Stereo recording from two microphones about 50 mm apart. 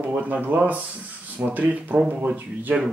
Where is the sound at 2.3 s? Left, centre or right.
Right.